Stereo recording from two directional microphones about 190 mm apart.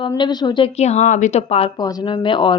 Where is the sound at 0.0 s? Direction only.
25° left (ahead or behind).